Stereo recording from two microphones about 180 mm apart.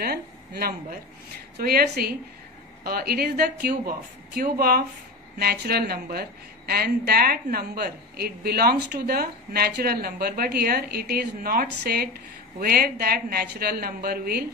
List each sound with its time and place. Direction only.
0.0 s a woman's voice: 60° right (ahead or behind)